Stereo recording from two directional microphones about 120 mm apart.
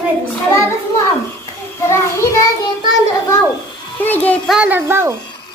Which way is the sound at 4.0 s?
15° left (ahead or behind).